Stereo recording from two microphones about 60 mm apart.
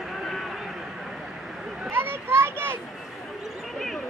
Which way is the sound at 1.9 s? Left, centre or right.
Right.